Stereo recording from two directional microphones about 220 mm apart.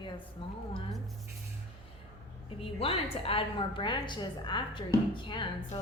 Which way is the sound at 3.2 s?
25° left (ahead or behind).